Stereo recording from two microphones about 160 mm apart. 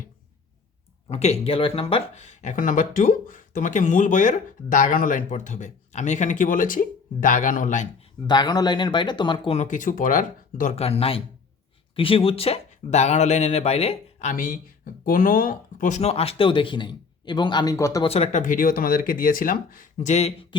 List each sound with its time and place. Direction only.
1.1 s speech: 40° left (ahead or behind)
8.3 s speech: 25° left (ahead or behind)
9.6 s speech: 55° left (ahead or behind)
10.8 s speech: 40° left (ahead or behind); by 18.0 s 20° left (ahead or behind)
18.0 s speech: 40° left (ahead or behind)